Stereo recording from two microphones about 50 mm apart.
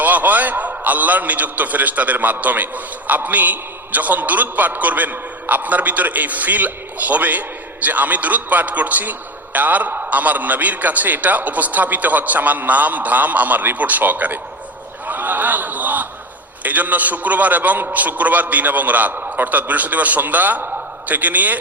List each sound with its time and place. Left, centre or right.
0.0 s a man's voice: right
15.0 s a sound: right
16.6 s a man's voice: right